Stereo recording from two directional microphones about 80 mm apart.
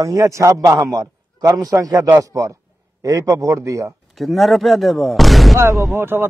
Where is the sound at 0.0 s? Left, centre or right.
Right.